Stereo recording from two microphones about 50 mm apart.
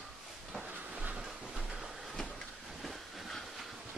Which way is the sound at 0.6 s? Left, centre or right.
Right.